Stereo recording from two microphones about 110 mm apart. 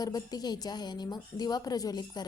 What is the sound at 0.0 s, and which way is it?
A woman's voice, 35° left (ahead or behind).